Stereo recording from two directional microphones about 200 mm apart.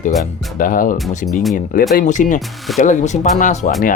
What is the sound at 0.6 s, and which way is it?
Speech, 40° left (ahead or behind).